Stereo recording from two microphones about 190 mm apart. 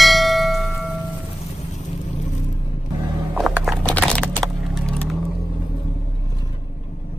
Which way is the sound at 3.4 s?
Centre (ahead or behind).